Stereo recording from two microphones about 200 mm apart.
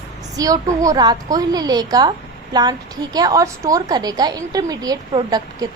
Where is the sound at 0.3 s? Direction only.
15° right (ahead or behind).